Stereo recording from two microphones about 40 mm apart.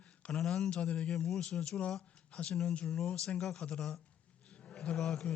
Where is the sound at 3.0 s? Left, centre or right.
Centre.